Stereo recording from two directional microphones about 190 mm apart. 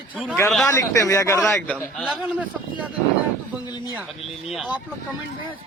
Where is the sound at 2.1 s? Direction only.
5° right (ahead or behind).